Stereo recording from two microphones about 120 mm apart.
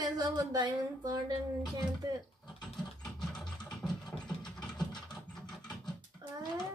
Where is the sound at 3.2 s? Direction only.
5° left (ahead or behind).